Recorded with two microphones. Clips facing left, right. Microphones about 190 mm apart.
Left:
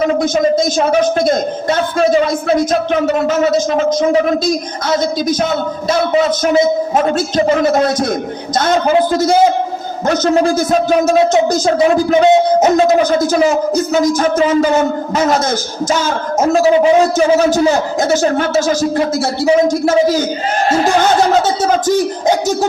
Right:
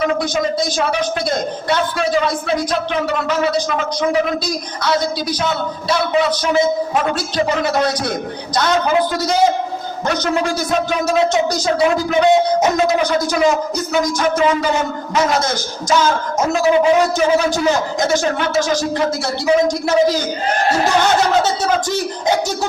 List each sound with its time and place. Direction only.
0.2 s a man's voice: 45° left (ahead or behind)
3.1 s a man's voice: 45° left (ahead or behind)
10.2 s speech: 40° left (ahead or behind)
12.2 s music: 30° left (ahead or behind)
12.9 s a man's voice: 50° left (ahead or behind)
15.1 s a man's voice: 45° left (ahead or behind)